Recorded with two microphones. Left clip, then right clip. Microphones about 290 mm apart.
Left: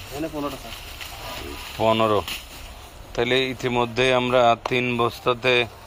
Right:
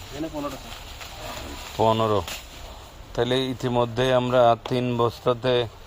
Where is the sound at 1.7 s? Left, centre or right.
Right.